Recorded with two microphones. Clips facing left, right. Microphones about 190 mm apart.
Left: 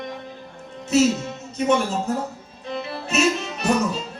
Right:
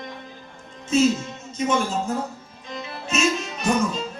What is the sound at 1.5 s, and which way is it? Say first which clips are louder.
Speech: left 3 dB; 65° left (ahead or behind).